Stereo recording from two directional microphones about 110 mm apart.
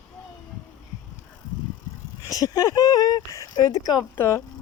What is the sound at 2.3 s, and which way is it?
Speech, 35° left (ahead or behind).